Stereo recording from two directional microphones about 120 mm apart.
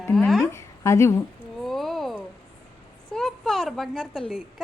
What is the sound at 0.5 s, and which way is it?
Speech, 25° left (ahead or behind).